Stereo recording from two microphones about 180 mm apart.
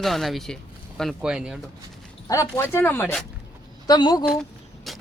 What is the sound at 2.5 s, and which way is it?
Speech, 10° left (ahead or behind).